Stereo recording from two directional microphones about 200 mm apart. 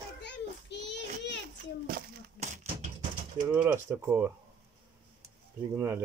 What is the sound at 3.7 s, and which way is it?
Speech, 10° right (ahead or behind).